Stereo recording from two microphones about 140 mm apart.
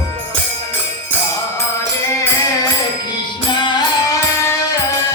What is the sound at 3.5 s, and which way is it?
Music, 30° left (ahead or behind).